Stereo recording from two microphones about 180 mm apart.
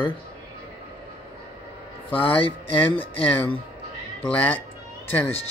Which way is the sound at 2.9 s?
10° left (ahead or behind).